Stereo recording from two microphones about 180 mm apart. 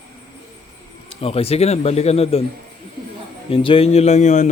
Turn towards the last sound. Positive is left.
turn(degrees=40)  # may be behind; listen again after turning